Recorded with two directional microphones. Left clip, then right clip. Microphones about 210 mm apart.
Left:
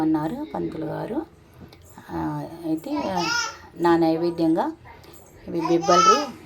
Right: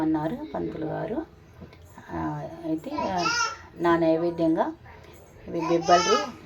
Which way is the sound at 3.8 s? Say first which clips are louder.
Left 2 dB; 15° left (ahead or behind).